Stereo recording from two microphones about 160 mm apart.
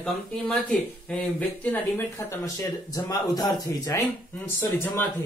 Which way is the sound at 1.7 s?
15° left (ahead or behind).